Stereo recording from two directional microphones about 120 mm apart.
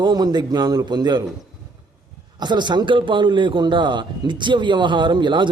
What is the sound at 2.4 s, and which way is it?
A man's voice, 40° right (ahead or behind).